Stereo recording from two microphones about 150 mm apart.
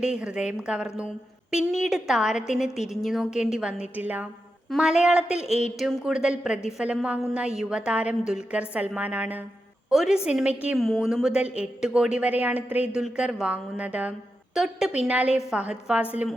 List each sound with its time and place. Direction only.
0.0 s a woman's voice: 5° right (ahead or behind)
5.5 s speech: 50° left (ahead or behind)
5.8 s a woman's voice: 5° right (ahead or behind)